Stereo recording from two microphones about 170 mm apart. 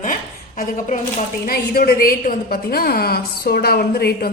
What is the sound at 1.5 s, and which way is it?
A woman's voice, 60° left (ahead or behind).